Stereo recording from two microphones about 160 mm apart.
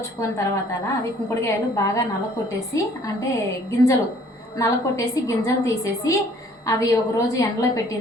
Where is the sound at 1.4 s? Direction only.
20° left (ahead or behind).